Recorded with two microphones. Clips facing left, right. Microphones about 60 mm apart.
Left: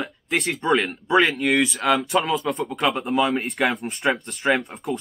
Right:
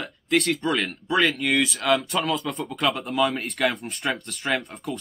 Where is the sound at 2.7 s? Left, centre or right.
Centre.